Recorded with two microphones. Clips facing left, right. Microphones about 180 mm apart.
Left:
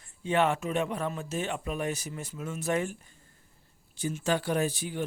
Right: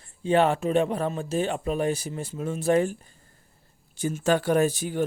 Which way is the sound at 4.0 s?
45° right (ahead or behind).